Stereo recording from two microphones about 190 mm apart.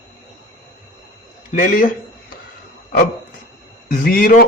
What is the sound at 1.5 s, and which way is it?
Speech, 45° left (ahead or behind).